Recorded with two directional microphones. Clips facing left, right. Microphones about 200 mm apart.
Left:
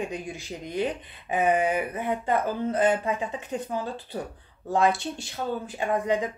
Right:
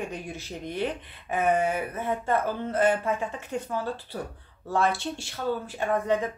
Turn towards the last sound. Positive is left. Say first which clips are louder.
# even
turn(degrees=15)  # may be behind; listen again after turning